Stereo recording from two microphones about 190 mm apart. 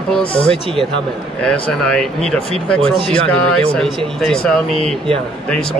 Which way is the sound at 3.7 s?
Centre (ahead or behind).